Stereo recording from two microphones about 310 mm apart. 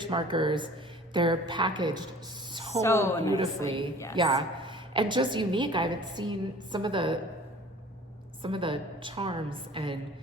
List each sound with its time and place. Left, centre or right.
0.0 s a woman's voice: centre
2.5 s a sound: centre
2.8 s a woman's voice: centre
4.2 s a woman's voice: centre
8.4 s a woman's voice: centre